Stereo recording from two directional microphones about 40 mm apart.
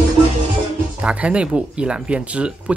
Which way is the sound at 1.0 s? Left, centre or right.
Right.